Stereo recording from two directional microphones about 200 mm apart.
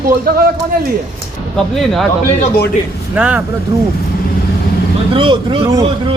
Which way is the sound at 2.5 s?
50° left (ahead or behind).